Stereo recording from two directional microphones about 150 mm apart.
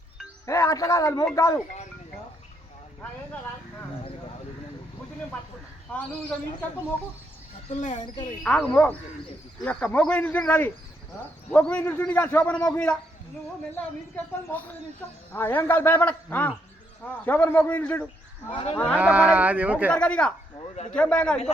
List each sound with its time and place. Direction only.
0.4 s a man's voice: 20° left (ahead or behind)
5.9 s a man's voice: 10° left (ahead or behind)
7.8 s speech: 55° left (ahead or behind)
8.0 s speech: 30° left (ahead or behind)
8.4 s a man's voice: 10° left (ahead or behind)
15.3 s a man's voice: 15° left (ahead or behind)
18.5 s speech: 40° left (ahead or behind)
18.9 s speech: 10° right (ahead or behind)
19.9 s a man's voice: 5° left (ahead or behind)